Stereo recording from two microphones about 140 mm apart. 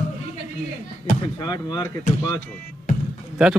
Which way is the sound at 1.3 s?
30° left (ahead or behind).